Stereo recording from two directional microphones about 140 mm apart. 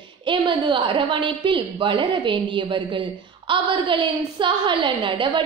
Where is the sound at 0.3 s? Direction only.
35° right (ahead or behind).